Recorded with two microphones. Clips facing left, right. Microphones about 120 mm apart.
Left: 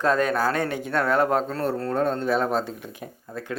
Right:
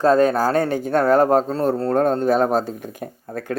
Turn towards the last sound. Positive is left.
turn(degrees=-50)  # may be behind; listen again after turning